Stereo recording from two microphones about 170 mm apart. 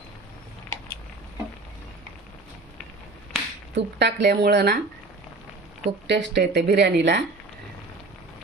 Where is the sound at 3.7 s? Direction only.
90° right; by 4.8 s 70° right (ahead or behind).